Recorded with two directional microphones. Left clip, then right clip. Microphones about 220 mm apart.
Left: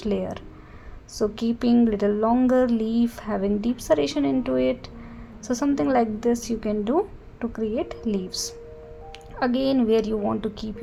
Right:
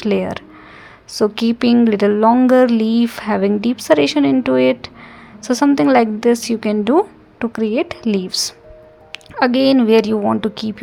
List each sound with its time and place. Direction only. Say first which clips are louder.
0.0 s speech: right 9 dB; 25° right (ahead or behind)